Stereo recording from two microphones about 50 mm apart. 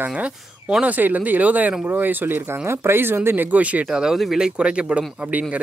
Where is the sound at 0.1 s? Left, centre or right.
Right.